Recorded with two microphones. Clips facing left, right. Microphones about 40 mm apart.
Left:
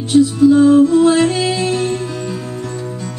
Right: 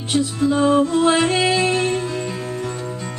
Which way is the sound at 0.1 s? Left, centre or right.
Right.